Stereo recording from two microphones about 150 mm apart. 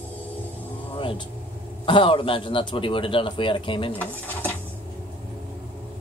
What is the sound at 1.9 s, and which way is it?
A man's voice, 35° left (ahead or behind).